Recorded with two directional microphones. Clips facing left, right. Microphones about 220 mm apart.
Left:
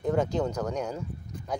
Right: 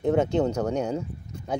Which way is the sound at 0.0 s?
25° right (ahead or behind).